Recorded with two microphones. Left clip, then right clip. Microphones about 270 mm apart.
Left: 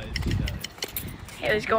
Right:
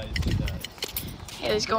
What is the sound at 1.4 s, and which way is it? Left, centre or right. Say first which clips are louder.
Speech: left 2 dB; right.